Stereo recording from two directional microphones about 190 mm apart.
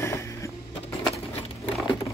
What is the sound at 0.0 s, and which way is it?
Vehicle, 15° left (ahead or behind).